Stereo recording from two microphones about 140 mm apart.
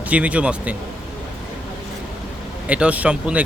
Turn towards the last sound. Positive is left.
turn(degrees=-10)  # may be behind; listen again after turning